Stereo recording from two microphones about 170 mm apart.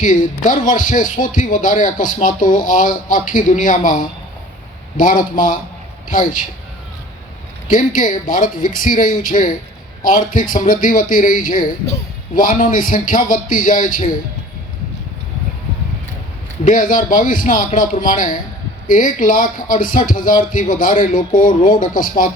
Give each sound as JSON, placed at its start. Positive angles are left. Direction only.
{"t": 0.0, "sound": "speech", "side_deg": 50}
{"t": 7.7, "sound": "speech", "side_deg": 50}
{"t": 16.6, "sound": "speech", "side_deg": 50}